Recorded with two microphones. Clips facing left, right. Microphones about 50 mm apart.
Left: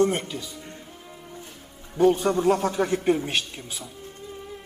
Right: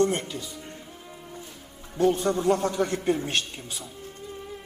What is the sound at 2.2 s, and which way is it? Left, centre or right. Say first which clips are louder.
Speech: left 3 dB; left.